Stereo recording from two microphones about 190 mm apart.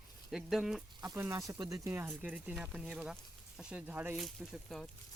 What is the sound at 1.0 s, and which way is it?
Speech, 15° right (ahead or behind).